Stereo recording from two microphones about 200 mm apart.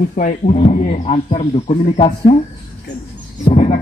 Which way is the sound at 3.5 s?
30° left (ahead or behind).